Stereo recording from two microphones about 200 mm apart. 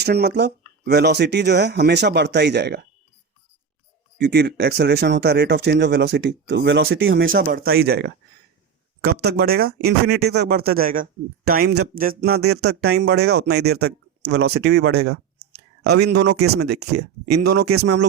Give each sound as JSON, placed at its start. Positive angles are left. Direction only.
{"t": 0.0, "sound": "speech", "side_deg": -55}
{"t": 4.2, "sound": "speech", "side_deg": -55}
{"t": 7.3, "sound": "speech", "side_deg": -50}
{"t": 9.2, "sound": "speech", "side_deg": -55}
{"t": 15.1, "sound": "speech", "side_deg": -55}
{"t": 16.6, "sound": "speech", "side_deg": -55}
{"t": 17.7, "sound": "speech", "side_deg": -90}